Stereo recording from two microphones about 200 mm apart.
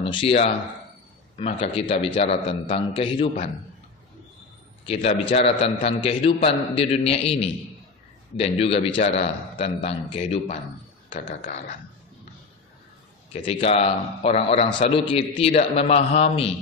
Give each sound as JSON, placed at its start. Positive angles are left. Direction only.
{"t": 0.0, "sound": "a man's voice", "side_deg": 25}
{"t": 4.8, "sound": "a man's voice", "side_deg": 25}
{"t": 11.2, "sound": "speech", "side_deg": 40}
{"t": 13.3, "sound": "a man's voice", "side_deg": 30}